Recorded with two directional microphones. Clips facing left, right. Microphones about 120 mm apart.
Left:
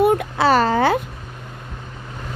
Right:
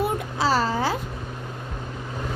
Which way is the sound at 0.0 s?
65° left (ahead or behind).